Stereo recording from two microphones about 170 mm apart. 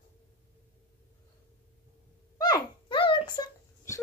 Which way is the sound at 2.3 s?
25° left (ahead or behind).